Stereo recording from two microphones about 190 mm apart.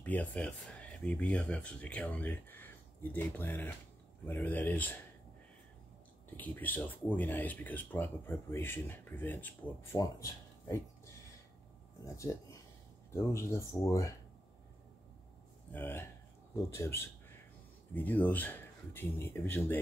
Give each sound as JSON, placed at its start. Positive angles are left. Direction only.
{"t": 0.0, "sound": "speech", "side_deg": 10}
{"t": 6.3, "sound": "speech", "side_deg": 10}
{"t": 12.0, "sound": "speech", "side_deg": 15}
{"t": 15.7, "sound": "speech", "side_deg": 10}